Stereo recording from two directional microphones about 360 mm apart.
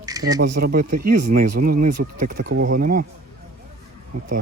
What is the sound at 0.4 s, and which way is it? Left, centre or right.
Speech, right.